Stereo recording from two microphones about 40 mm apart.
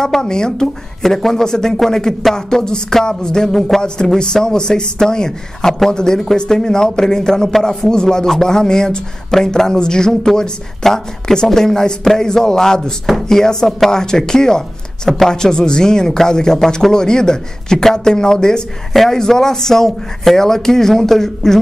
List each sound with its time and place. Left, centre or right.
0.0 s speech: centre
15.3 s speech: centre